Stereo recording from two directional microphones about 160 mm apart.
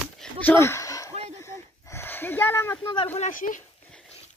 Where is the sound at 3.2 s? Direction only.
55° left (ahead or behind).